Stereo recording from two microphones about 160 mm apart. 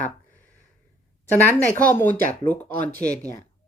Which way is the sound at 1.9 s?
15° left (ahead or behind).